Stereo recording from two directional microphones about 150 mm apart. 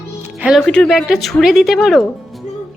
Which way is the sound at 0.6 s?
5° left (ahead or behind).